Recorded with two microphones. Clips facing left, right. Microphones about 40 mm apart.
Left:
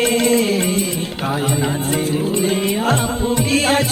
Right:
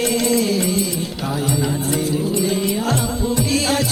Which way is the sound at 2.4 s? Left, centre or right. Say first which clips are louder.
Left 2 dB; left.